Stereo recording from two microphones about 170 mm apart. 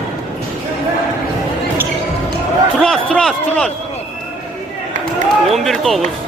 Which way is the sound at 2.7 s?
5° left (ahead or behind).